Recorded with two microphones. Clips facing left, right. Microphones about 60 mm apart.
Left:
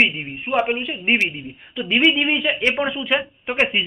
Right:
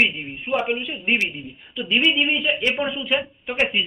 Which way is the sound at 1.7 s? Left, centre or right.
Left.